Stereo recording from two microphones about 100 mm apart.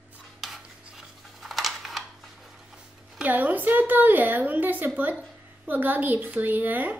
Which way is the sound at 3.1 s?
15° right (ahead or behind).